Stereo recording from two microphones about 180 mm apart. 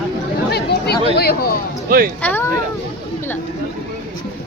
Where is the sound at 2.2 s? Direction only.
10° left (ahead or behind).